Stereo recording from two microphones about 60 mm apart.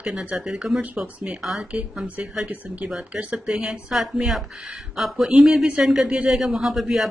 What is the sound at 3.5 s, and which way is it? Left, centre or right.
A woman's voice, centre.